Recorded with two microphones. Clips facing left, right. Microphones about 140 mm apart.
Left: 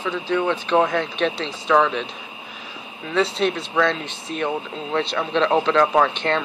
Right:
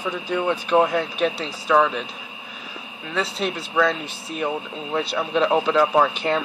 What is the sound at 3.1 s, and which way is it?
Speech, 5° right (ahead or behind).